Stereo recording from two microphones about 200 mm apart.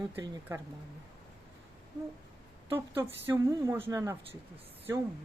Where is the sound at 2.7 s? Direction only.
10° right (ahead or behind).